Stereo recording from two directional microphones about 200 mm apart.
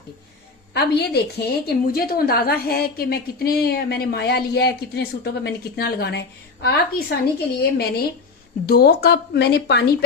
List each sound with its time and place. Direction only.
0.7 s a woman's voice: 55° left (ahead or behind)